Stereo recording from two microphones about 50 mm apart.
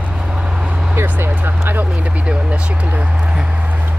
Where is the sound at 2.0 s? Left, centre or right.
Right.